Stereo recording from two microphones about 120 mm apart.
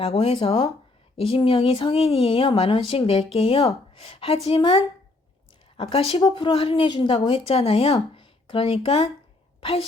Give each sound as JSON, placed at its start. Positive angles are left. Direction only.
{"t": 0.0, "sound": "a woman's voice", "side_deg": 60}